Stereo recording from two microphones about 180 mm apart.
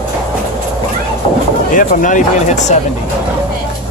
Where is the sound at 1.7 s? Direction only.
45° left (ahead or behind).